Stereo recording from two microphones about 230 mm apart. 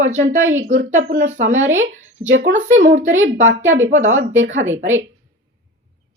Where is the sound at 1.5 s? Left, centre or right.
Right.